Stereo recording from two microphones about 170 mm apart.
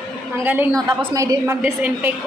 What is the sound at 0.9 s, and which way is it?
A woman's voice, 20° right (ahead or behind).